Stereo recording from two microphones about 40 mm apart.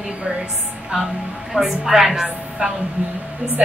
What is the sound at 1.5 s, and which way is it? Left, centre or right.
Speech, centre.